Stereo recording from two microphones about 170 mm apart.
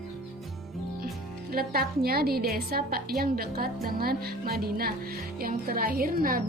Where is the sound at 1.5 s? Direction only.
60° right (ahead or behind).